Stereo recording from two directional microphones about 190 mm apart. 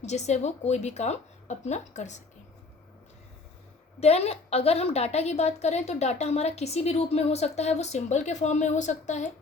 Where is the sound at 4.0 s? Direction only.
35° left (ahead or behind).